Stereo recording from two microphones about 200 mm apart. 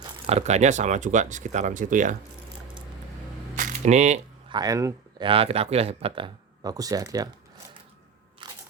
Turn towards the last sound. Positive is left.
turn(degrees=-15)  # may be behind; listen again after turning